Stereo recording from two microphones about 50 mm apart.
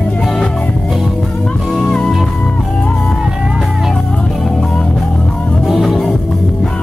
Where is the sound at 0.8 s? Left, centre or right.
Centre.